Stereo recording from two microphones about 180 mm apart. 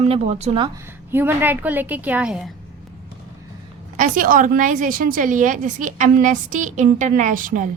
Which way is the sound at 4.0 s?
50° right (ahead or behind).